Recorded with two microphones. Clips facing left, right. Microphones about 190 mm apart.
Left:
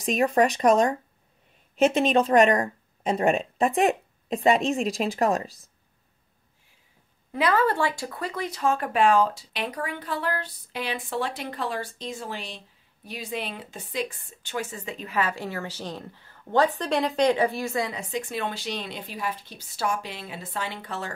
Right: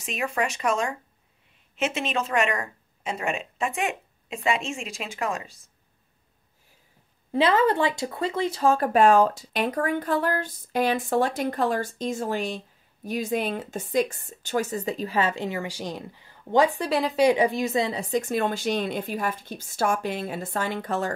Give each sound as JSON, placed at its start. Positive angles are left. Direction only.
{"t": 0.0, "sound": "speech", "side_deg": 35}
{"t": 7.3, "sound": "speech", "side_deg": -25}
{"t": 17.3, "sound": "a woman's voice", "side_deg": -15}
{"t": 18.1, "sound": "speech", "side_deg": -45}